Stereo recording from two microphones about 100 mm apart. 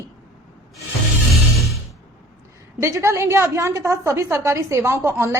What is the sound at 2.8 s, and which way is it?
A woman's voice, 30° right (ahead or behind).